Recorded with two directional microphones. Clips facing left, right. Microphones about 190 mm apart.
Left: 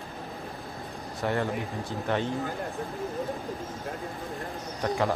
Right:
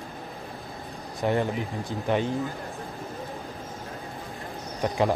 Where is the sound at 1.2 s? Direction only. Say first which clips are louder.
Right 3 dB; 15° right (ahead or behind).